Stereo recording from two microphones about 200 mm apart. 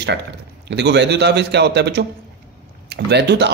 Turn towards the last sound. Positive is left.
turn(degrees=-60)  # may be behind; listen again after turning